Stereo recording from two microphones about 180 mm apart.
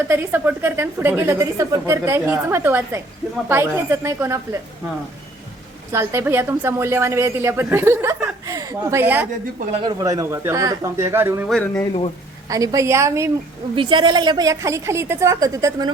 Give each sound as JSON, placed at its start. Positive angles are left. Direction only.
{"t": 0.1, "sound": "a woman's voice", "side_deg": -10}
{"t": 5.9, "sound": "a woman's voice", "side_deg": -15}
{"t": 11.4, "sound": "speech", "side_deg": 0}
{"t": 12.5, "sound": "a woman's voice", "side_deg": -20}
{"t": 13.7, "sound": "a woman's voice", "side_deg": -25}